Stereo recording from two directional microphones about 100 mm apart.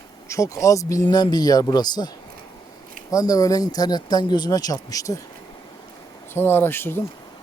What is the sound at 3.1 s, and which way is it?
Speech, 35° left (ahead or behind).